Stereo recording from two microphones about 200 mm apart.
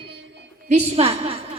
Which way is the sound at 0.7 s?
30° right (ahead or behind).